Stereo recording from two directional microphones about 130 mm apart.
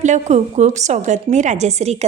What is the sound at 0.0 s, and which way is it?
A woman's voice, 65° right (ahead or behind).